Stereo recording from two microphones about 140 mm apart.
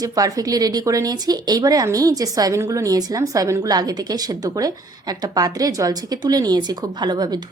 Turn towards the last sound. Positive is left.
turn(degrees=-30)  # may be behind; listen again after turning